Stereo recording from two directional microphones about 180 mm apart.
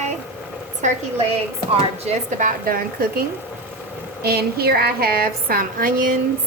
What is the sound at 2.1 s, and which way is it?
A woman's voice, 50° right (ahead or behind).